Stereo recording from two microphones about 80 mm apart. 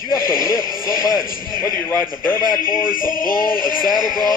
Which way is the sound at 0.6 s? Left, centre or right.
Right.